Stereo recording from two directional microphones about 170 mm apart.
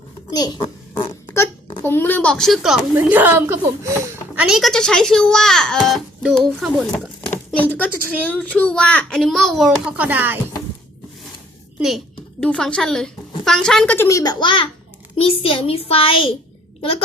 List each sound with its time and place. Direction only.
0.3 s a child's voice: 20° left (ahead or behind)
1.3 s a sound: 15° left (ahead or behind); by 2.8 s centre (ahead or behind)
2.9 s a woman's voice: 10° right (ahead or behind)
4.4 s a child's voice: centre (ahead or behind)
11.8 s a child's voice: centre (ahead or behind); by 16.3 s 30° left (ahead or behind)